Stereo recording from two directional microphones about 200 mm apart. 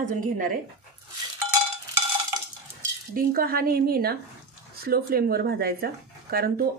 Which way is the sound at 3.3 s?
45° right (ahead or behind).